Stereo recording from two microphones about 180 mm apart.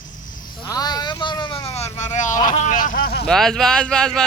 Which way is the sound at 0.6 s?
20° left (ahead or behind).